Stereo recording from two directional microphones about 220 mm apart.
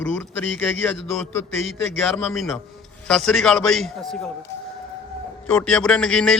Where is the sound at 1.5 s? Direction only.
60° left (ahead or behind).